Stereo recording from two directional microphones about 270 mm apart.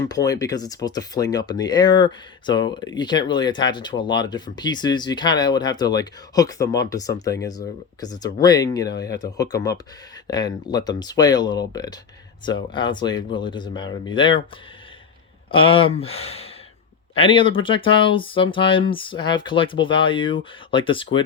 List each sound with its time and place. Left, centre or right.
0.0 s speech: centre
15.5 s speech: centre